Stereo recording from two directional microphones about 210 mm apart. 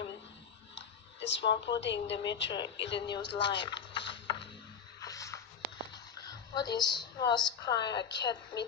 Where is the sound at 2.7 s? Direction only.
60° left (ahead or behind).